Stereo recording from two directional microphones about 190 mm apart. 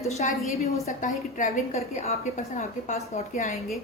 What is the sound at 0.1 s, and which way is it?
A woman's voice, 35° left (ahead or behind).